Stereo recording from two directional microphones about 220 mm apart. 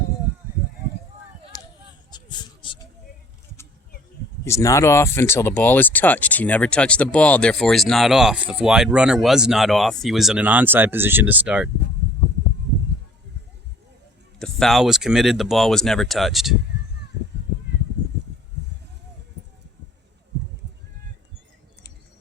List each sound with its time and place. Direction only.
2.0 s a sound: 20° left (ahead or behind)
4.4 s speech: 15° left (ahead or behind); by 11.7 s 5° right (ahead or behind)
14.3 s speech: centre (ahead or behind)